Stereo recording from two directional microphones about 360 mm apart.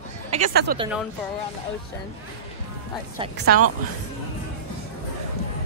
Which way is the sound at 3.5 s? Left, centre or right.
Right.